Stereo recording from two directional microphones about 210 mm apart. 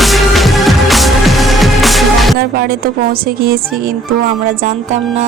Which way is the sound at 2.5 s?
45° right (ahead or behind).